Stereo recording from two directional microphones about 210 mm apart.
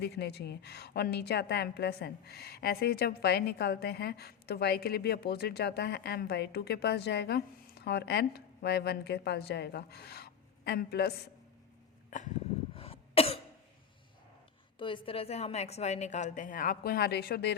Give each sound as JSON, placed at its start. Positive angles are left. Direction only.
{"t": 0.0, "sound": "a woman's voice", "side_deg": 50}
{"t": 12.1, "sound": "a sound", "side_deg": 35}
{"t": 12.7, "sound": "cough", "side_deg": 30}
{"t": 14.8, "sound": "a woman's voice", "side_deg": 25}